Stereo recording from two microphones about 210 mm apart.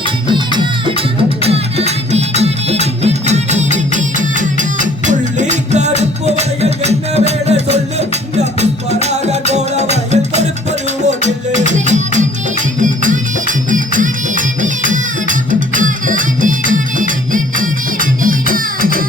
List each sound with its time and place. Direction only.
0.3 s music: 20° right (ahead or behind); by 19.0 s 40° right (ahead or behind)